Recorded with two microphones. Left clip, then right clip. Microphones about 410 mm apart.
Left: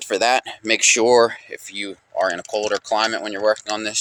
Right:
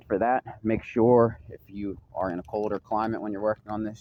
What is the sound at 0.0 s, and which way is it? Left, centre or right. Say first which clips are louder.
Speech: left 7 dB; right.